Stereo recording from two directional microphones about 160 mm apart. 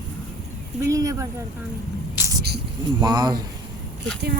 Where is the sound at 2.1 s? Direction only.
20° right (ahead or behind).